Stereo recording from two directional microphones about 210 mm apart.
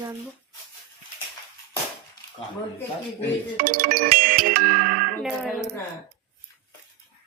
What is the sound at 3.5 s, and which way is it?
Speech, 45° right (ahead or behind).